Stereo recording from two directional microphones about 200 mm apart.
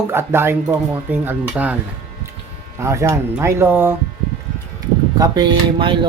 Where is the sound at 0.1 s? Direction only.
10° right (ahead or behind).